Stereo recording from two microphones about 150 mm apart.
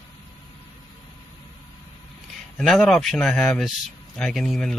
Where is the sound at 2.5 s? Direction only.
Centre (ahead or behind).